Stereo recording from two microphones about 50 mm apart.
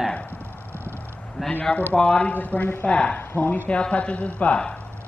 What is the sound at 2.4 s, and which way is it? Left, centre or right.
Speech, left.